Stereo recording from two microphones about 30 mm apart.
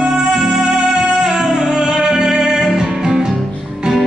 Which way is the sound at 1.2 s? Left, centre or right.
Right.